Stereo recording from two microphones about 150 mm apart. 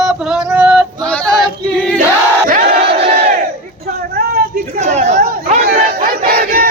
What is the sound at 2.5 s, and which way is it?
Battle cry, 90° right.